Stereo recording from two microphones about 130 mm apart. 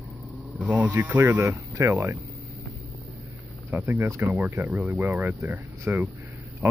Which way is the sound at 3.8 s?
20° right (ahead or behind).